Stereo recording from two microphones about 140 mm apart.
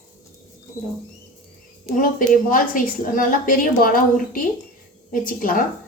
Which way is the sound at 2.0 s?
75° left (ahead or behind).